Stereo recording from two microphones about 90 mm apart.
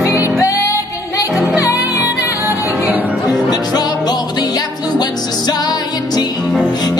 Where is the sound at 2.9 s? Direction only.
20° right (ahead or behind).